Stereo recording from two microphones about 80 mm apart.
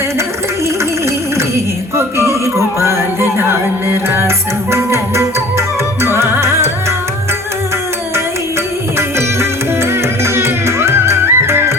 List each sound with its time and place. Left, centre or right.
2.0 s music: right
9.0 s music: right